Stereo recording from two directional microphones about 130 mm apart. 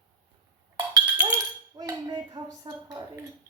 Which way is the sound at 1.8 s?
30° right (ahead or behind).